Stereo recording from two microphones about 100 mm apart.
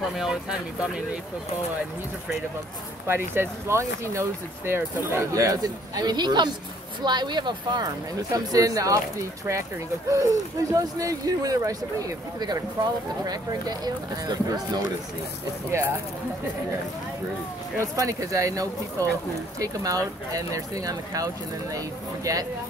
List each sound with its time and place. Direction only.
0.0 s speech: 5° right (ahead or behind)
3.1 s speech: 25° right (ahead or behind)
10.0 s speech: 35° right (ahead or behind)
17.7 s speech: 35° right (ahead or behind)